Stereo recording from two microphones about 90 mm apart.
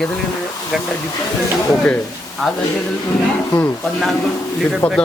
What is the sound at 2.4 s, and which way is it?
A man's voice, 5° left (ahead or behind).